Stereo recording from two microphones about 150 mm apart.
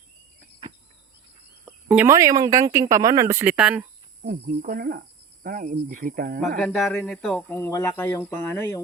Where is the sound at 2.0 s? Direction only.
20° right (ahead or behind).